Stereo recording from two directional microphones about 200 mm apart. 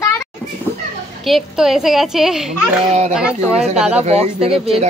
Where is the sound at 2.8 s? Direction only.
35° right (ahead or behind).